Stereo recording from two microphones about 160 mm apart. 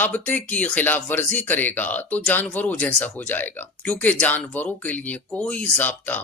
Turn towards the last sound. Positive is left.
turn(degrees=10)  # may be behind; listen again after turning